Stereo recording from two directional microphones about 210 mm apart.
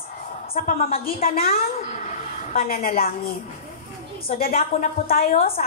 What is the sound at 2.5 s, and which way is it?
Speech, 45° left (ahead or behind).